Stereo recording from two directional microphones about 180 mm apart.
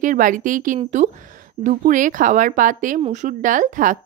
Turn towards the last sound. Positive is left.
turn(degrees=-45)  # may be behind; listen again after turning